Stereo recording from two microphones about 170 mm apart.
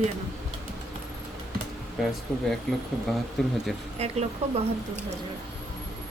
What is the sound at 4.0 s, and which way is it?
Speech, 40° right (ahead or behind).